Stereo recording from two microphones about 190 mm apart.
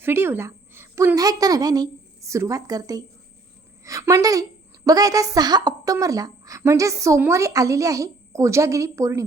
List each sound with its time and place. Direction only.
0.0 s a woman's voice: 10° right (ahead or behind)